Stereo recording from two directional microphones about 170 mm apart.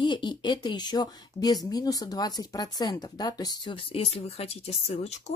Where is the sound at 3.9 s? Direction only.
35° left (ahead or behind).